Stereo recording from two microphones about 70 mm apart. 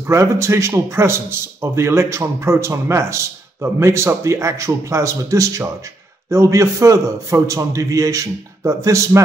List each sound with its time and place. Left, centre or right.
0.0 s a man's voice: right